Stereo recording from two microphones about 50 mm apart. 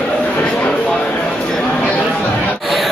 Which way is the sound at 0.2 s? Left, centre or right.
Left.